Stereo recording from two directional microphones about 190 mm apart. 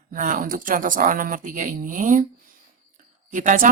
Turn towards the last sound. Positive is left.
turn(degrees=-45)  # may be behind; listen again after turning